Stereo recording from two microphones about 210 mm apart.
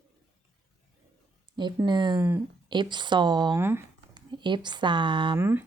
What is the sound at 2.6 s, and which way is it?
Speech, 20° right (ahead or behind).